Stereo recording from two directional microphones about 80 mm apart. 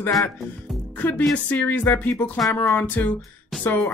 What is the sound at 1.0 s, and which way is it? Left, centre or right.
Speech, left.